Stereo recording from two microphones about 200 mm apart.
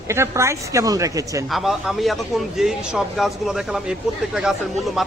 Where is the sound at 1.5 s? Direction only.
Centre (ahead or behind).